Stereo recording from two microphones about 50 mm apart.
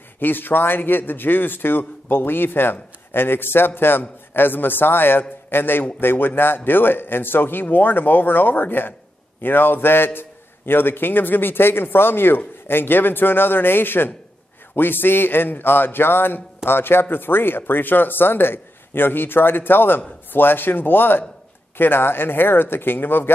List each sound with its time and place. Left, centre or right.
0.2 s a man's voice: left